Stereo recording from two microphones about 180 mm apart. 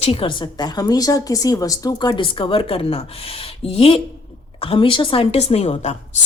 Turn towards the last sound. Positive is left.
turn(degrees=35)  # may be behind; listen again after turning